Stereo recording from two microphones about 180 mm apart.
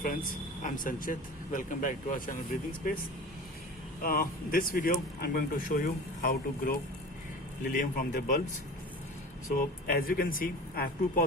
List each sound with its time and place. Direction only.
0.0 s speech: 50° left (ahead or behind)
4.0 s speech: 55° left (ahead or behind)
9.6 s speech: 55° left (ahead or behind)